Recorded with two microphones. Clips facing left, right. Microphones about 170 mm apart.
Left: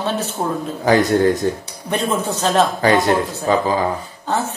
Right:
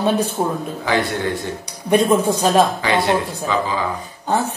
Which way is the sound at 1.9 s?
10° right (ahead or behind).